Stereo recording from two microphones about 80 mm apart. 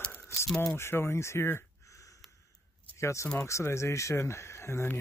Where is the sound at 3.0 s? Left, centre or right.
Left.